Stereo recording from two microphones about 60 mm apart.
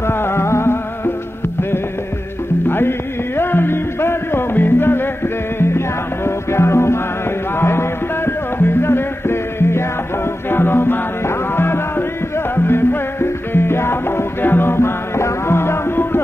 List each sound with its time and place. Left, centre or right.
0.0 s music: left
2.7 s music: left